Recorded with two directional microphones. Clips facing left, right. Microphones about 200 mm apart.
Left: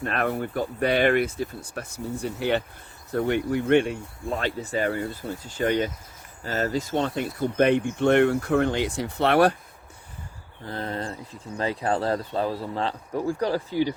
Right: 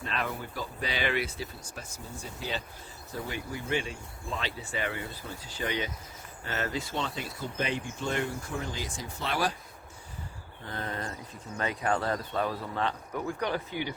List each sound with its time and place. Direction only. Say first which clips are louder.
0.0 s speech: left 8 dB; 55° left (ahead or behind)
6.4 s speech: left 7 dB; 40° left (ahead or behind); by 9.6 s 60° left (ahead or behind)
10.6 s speech: left 5 dB; 35° left (ahead or behind)